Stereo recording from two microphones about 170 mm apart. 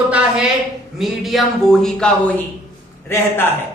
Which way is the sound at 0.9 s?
Centre (ahead or behind).